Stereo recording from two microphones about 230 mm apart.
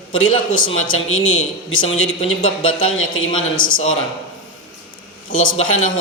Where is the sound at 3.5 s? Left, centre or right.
Left.